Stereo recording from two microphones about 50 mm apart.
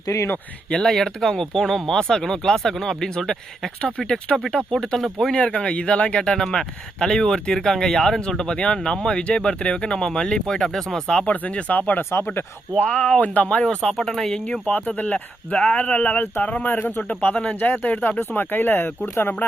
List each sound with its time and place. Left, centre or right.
0.7 s a man's voice: centre
3.8 s a man's voice: left; by 5.1 s centre
5.3 s a man's voice: centre
11.1 s speech: left
12.1 s speech: left
12.7 s speech: left
13.2 s speech: left
13.6 s a man's voice: centre
14.7 s speech: left
15.5 s a man's voice: centre; by 19.6 s left